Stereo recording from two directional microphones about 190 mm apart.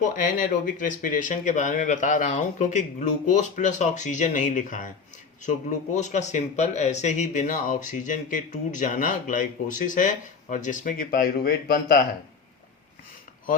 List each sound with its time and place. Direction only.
0.0 s speech: 45° left (ahead or behind)